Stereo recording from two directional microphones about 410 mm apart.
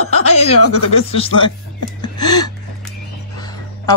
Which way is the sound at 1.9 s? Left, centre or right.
Centre.